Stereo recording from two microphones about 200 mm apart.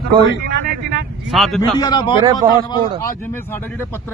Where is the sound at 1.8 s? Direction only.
20° left (ahead or behind).